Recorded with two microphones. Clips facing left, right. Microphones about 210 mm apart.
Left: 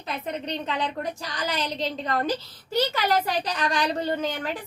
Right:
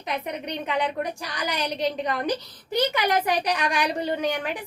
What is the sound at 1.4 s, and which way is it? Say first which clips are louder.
A woman's voice: right 2 dB; 15° right (ahead or behind).